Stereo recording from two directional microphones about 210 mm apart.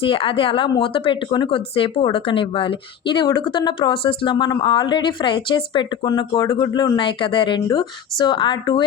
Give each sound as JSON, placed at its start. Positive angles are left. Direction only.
{"t": 0.0, "sound": "a woman's voice", "side_deg": 25}